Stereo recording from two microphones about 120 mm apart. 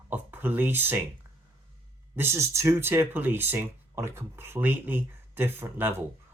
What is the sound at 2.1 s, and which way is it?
Speech, 20° right (ahead or behind).